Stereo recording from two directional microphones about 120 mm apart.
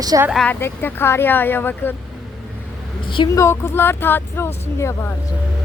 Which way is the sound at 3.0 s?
45° left (ahead or behind).